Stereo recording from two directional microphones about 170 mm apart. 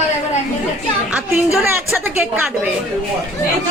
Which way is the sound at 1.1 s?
5° right (ahead or behind).